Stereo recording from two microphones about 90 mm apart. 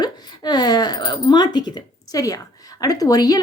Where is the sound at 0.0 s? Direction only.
50° left (ahead or behind).